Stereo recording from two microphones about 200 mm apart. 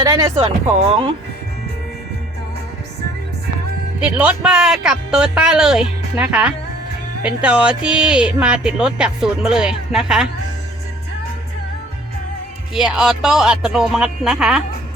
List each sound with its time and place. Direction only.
0.0 s speech: 20° right (ahead or behind)
0.3 s speech: 30° right (ahead or behind)
4.0 s speech: 5° right (ahead or behind)
12.7 s speech: 5° right (ahead or behind)